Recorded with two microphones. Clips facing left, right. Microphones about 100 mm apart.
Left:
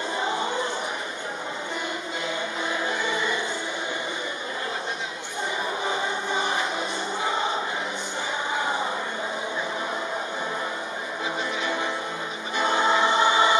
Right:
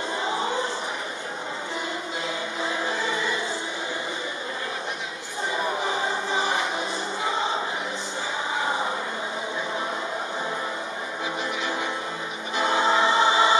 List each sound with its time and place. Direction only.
12.5 s choir: 30° right (ahead or behind)